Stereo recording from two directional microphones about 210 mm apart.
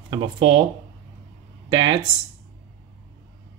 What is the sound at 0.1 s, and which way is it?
Speech, 25° right (ahead or behind).